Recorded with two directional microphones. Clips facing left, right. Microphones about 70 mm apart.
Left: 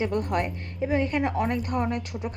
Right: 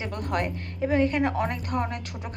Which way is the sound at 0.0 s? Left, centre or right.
Left.